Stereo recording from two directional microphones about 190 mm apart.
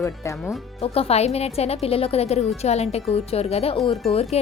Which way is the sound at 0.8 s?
30° left (ahead or behind).